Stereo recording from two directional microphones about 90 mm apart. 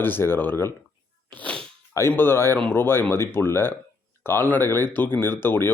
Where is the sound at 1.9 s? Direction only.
30° left (ahead or behind).